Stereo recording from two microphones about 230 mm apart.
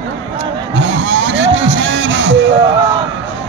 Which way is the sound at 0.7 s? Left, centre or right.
Right.